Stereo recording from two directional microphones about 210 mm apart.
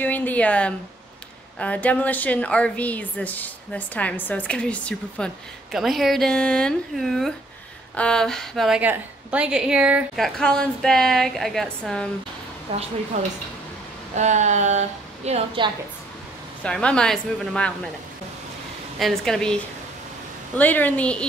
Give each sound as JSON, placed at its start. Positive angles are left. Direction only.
{"t": 0.0, "sound": "a woman's voice", "side_deg": 10}
{"t": 12.7, "sound": "a woman's voice", "side_deg": -25}
{"t": 16.6, "sound": "a woman's voice", "side_deg": 5}
{"t": 18.9, "sound": "a woman's voice", "side_deg": 0}